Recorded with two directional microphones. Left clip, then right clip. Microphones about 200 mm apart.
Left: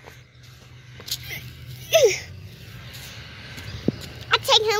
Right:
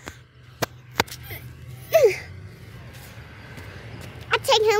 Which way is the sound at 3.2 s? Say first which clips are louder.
Left 4 dB; 25° left (ahead or behind).